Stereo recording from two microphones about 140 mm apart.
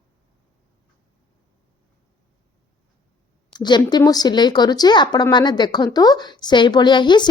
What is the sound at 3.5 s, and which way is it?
Speech, 30° left (ahead or behind).